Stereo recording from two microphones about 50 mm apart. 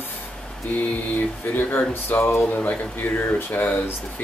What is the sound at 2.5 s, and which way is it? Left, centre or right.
Speech, left.